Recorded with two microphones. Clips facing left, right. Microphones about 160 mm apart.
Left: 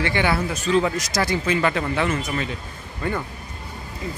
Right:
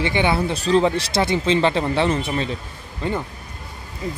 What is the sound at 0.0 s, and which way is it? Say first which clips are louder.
Speech: right 2 dB; 20° right (ahead or behind).